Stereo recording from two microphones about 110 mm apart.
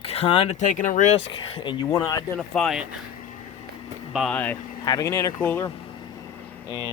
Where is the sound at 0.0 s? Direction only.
65° left (ahead or behind); by 0.7 s 85° left.